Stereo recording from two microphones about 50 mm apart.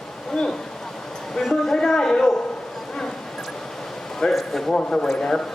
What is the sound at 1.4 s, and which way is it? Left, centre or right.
Speech, centre.